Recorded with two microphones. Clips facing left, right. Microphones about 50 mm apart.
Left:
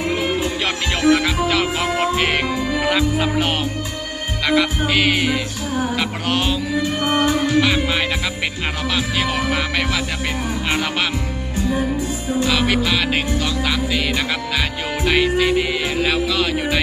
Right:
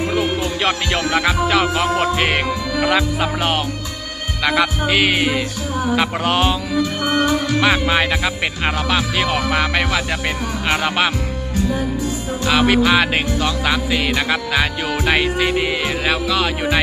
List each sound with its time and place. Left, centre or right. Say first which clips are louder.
0.2 s music: right 1 dB; right
1.5 s music: right 3 dB; centre
7.6 s speech: right 3 dB; right
9.7 s music: right 2 dB; right
12.5 s music: right 6 dB; right